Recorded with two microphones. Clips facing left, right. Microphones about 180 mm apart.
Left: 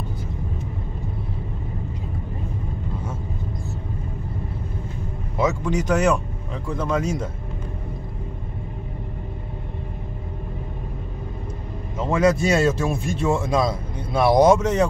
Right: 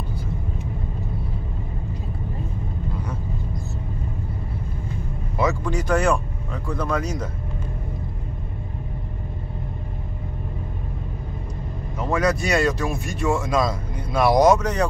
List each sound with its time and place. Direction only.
5.4 s speech: 20° left (ahead or behind)
12.0 s speech: 25° left (ahead or behind)